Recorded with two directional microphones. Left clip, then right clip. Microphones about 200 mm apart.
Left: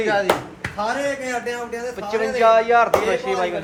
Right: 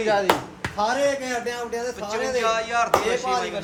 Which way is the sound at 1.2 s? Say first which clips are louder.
Left 2 dB; 55° right (ahead or behind).